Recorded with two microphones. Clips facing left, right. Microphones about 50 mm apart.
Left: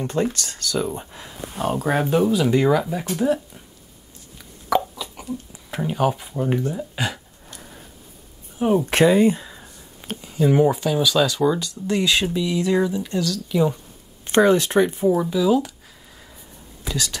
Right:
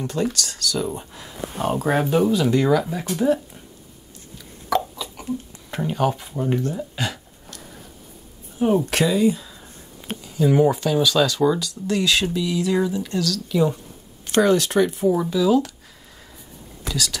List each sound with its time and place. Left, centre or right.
0.0 s speech: left
0.9 s speech: centre
1.5 s speech: centre
4.6 s a sound: centre
5.5 s speech: centre
8.5 s speech: centre
8.8 s speech: left
9.4 s a sound: centre
10.6 s speech: centre
11.6 s speech: left
13.0 s speech: centre
14.2 s speech: centre
15.0 s speech: centre
16.9 s speech: left